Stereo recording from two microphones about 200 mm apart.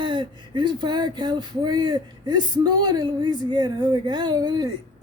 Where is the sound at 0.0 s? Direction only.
25° right (ahead or behind).